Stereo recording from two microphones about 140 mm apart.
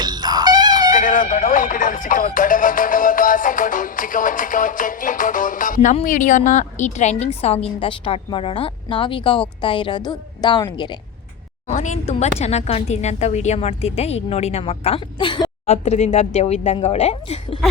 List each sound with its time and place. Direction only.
0.0 s music: 30° right (ahead or behind)
0.9 s music: 70° left (ahead or behind); by 9.4 s 40° left (ahead or behind)
9.6 s a woman's voice: 35° left (ahead or behind)
11.7 s a woman's voice: 60° left (ahead or behind); by 15.4 s 35° left (ahead or behind)
15.6 s a woman's voice: 50° left (ahead or behind)